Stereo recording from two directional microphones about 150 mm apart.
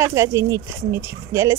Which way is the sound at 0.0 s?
20° right (ahead or behind).